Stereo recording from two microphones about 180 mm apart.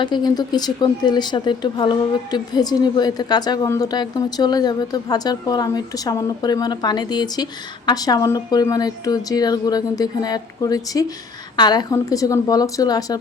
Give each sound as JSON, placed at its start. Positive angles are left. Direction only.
{"t": 0.0, "sound": "speech", "side_deg": 25}